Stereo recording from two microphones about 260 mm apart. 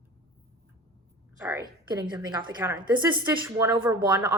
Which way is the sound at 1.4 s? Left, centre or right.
Centre.